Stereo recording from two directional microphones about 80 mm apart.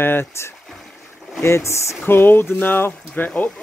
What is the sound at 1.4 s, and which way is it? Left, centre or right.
Speech, left.